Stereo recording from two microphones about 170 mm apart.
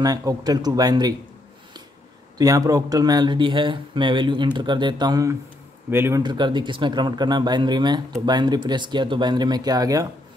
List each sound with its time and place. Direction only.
0.0 s speech: 20° right (ahead or behind)
2.3 s a man's voice: 20° right (ahead or behind)
6.2 s speech: 25° right (ahead or behind)